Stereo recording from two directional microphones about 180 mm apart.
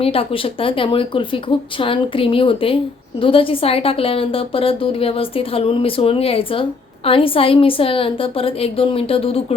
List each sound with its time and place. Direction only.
0.0 s a woman's voice: 30° left (ahead or behind)